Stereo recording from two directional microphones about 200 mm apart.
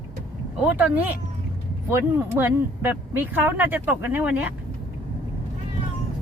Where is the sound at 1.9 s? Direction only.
10° right (ahead or behind).